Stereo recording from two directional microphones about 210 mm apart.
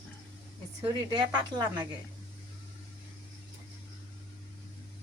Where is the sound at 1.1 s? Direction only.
20° right (ahead or behind).